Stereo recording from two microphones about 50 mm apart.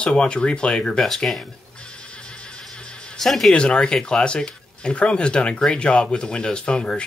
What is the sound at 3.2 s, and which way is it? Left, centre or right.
Speech, centre.